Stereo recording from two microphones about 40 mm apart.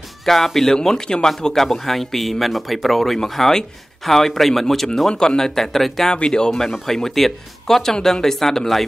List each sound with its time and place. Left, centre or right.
0.2 s speech: centre
0.7 s speech: centre
6.2 s speech: centre
6.5 s speech: centre